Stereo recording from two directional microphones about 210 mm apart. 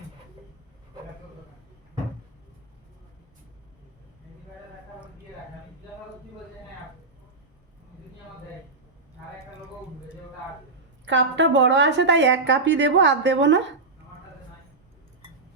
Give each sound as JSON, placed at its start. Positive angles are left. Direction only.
{"t": 11.0, "sound": "a woman's voice", "side_deg": -60}